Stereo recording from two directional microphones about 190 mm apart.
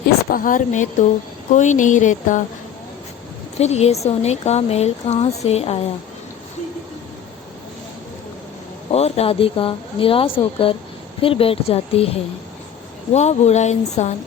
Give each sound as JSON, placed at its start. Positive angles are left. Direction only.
{"t": 0.3, "sound": "speech", "side_deg": 45}
{"t": 3.6, "sound": "speech", "side_deg": 35}
{"t": 8.9, "sound": "a woman's voice", "side_deg": 35}